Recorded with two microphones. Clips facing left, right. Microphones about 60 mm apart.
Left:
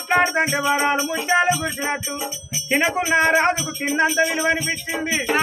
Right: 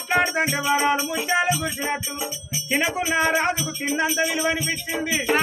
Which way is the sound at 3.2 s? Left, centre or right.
Left.